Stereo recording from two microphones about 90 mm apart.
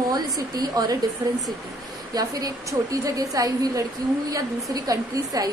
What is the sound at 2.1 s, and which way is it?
A woman's voice, 45° right (ahead or behind).